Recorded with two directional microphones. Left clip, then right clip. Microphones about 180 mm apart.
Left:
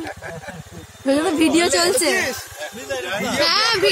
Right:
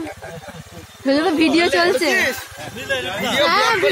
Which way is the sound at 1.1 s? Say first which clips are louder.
Right 1 dB; 35° right (ahead or behind).